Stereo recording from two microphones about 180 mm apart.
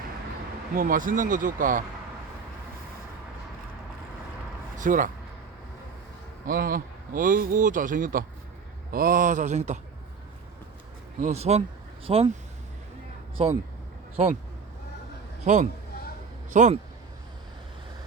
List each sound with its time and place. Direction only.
0.8 s speech: 50° right (ahead or behind)
4.8 s speech: 50° right (ahead or behind)
6.5 s speech: 55° right (ahead or behind)
11.2 s speech: 35° right (ahead or behind)
13.4 s speech: 35° right (ahead or behind)
15.4 s speech: 45° right (ahead or behind)